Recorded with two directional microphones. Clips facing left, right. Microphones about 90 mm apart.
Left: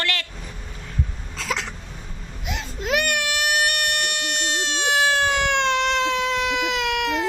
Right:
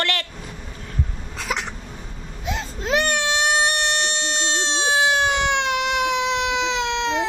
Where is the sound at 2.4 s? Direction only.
30° right (ahead or behind).